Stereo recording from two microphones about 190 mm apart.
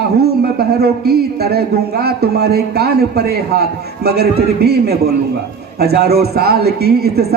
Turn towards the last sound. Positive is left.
turn(degrees=-55)  # may be behind; listen again after turning